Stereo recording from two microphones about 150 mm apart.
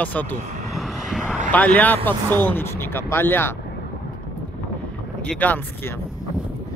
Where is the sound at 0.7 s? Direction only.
Centre (ahead or behind).